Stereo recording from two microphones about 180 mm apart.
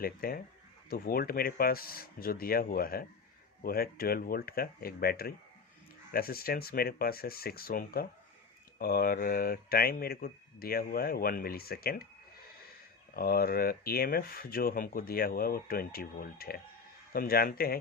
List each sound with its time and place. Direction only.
0.0 s speech: 55° left (ahead or behind)
13.1 s speech: 55° left (ahead or behind)